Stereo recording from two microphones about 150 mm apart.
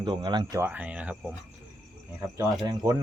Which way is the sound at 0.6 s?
10° right (ahead or behind).